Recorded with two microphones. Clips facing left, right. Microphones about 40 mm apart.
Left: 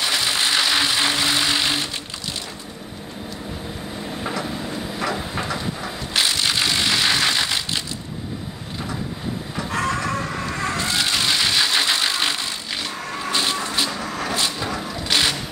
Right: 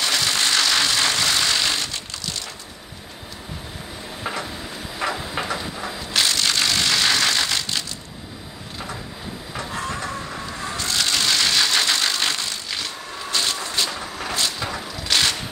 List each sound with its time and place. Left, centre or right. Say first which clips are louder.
0.0 s vehicle: even; centre
4.2 s vehicle: left 1 dB; centre
9.7 s vehicle: left 6 dB; left
10.5 s a sound: left 6 dB; left
10.8 s vehicle: right 1 dB; centre
13.3 s a sound: left 2 dB; centre
14.2 s vehicle: left 1 dB; centre